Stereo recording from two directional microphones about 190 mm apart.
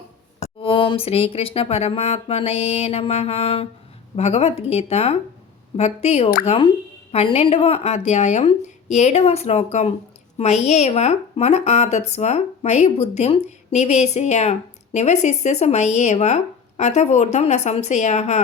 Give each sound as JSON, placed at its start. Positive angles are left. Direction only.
{"t": 0.6, "sound": "a woman's voice", "side_deg": 25}